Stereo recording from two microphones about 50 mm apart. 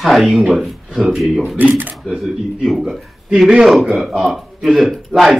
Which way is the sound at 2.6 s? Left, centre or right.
Centre.